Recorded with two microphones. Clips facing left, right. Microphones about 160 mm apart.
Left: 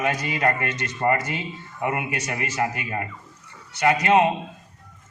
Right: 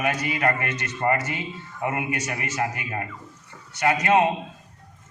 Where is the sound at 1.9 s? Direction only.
25° left (ahead or behind).